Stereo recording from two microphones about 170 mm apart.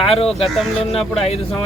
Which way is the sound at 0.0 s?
35° left (ahead or behind).